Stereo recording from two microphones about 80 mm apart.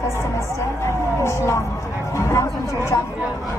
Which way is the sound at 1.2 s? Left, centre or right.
Left.